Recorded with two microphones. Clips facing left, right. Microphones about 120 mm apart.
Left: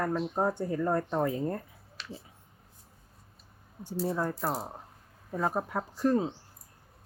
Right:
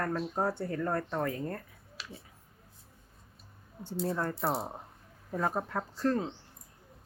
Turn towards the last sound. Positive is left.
turn(degrees=15)  # may be behind; listen again after turning